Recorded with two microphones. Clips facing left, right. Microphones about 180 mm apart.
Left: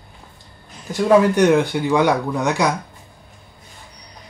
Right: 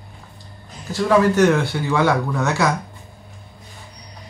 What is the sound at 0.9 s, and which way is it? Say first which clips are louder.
Speech: left 2 dB; 15° left (ahead or behind).